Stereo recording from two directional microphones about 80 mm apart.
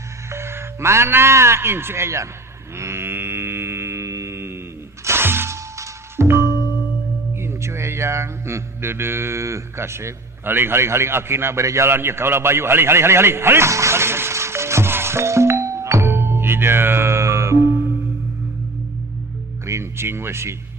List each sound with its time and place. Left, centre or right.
0.3 s speech: right
2.7 s mantra: right
5.0 s music: right
7.3 s mantra: right
19.6 s speech: right